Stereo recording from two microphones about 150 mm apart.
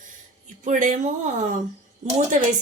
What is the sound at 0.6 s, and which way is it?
A woman's voice, 60° right (ahead or behind).